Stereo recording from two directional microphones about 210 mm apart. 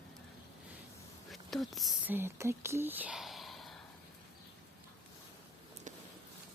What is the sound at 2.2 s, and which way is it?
Speech, 10° right (ahead or behind).